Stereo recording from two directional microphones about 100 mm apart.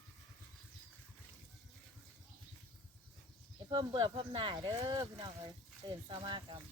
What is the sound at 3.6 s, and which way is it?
Speech, 55° right (ahead or behind).